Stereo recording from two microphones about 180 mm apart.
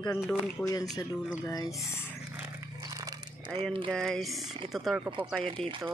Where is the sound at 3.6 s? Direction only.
30° right (ahead or behind).